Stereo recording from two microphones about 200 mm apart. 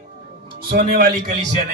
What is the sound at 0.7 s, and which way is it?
Speech, 50° right (ahead or behind).